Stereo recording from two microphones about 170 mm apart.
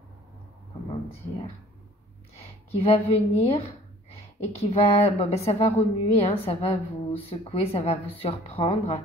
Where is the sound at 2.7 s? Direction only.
35° left (ahead or behind).